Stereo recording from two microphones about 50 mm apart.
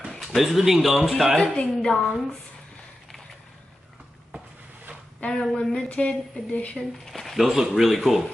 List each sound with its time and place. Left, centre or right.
0.1 s speech: centre
1.3 s a woman's voice: centre
5.2 s a woman's voice: centre
6.8 s speech: centre
7.3 s speech: centre